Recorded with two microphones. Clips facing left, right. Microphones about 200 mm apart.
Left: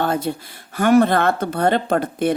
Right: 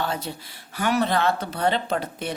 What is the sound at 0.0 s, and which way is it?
Speech, 55° left (ahead or behind).